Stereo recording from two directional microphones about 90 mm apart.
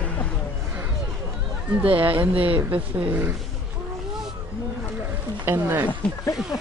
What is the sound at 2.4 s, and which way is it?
Speech, 15° right (ahead or behind).